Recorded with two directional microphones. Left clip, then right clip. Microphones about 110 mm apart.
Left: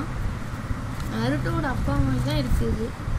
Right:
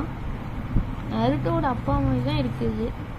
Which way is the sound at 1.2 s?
75° right (ahead or behind).